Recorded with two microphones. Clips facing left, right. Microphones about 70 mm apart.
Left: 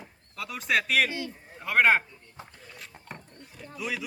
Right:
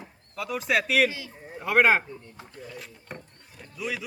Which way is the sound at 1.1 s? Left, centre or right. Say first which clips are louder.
Left 4 dB; left.